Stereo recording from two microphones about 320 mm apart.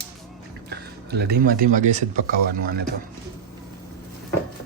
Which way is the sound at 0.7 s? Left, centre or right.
Right.